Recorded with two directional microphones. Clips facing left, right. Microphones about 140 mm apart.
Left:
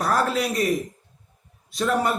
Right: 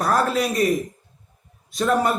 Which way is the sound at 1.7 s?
45° right (ahead or behind).